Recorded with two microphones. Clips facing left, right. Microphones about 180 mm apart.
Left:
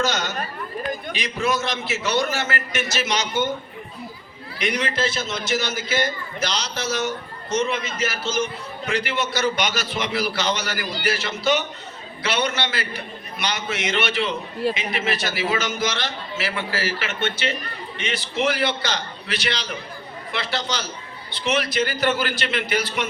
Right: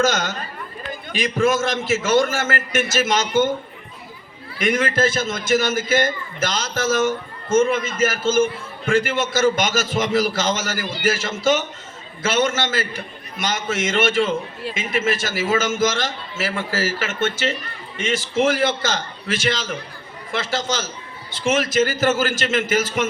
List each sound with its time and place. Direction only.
0.0 s a man's voice: 45° right (ahead or behind)
4.5 s a man's voice: 50° right (ahead or behind)